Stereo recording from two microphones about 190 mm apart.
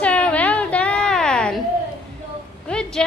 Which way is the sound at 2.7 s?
5° left (ahead or behind).